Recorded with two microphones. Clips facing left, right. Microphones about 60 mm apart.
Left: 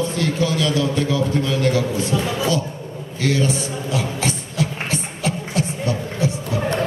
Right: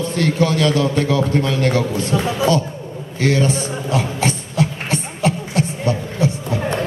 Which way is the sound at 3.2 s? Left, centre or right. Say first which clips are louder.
Right 3 dB; right.